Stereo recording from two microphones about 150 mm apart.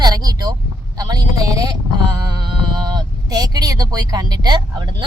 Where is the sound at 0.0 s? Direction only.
25° right (ahead or behind).